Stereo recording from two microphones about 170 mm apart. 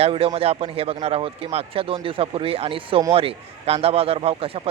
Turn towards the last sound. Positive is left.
turn(degrees=-35)  # may be behind; listen again after turning